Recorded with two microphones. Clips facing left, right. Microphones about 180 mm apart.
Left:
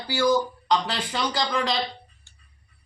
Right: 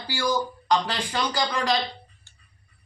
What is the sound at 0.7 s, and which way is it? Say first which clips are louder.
Speech: even; centre (ahead or behind).